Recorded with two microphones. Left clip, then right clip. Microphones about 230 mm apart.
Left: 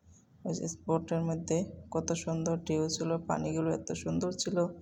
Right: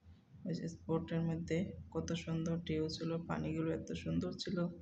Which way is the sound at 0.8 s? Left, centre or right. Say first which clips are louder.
Left 7 dB; centre.